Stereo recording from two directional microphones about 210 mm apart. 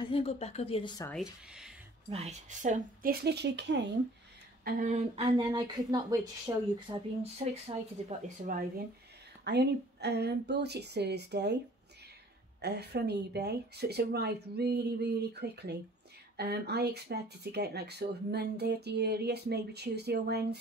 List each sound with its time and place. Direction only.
0.0 s speech: 25° left (ahead or behind)
1.1 s speech: 5° right (ahead or behind)
2.0 s speech: 30° right (ahead or behind); by 3.8 s 55° right (ahead or behind)
4.6 s speech: 40° right (ahead or behind)
5.2 s speech: 20° right (ahead or behind)
7.4 s speech: 35° right (ahead or behind)
8.5 s speech: 40° right (ahead or behind)
9.4 s speech: 50° right (ahead or behind)
12.6 s speech: 50° right (ahead or behind)